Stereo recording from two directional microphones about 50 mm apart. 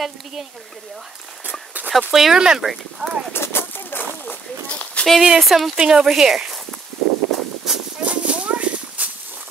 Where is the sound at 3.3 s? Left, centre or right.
Left.